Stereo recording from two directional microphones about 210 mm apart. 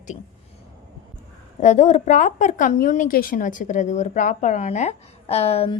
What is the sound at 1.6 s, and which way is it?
Speech, 35° left (ahead or behind).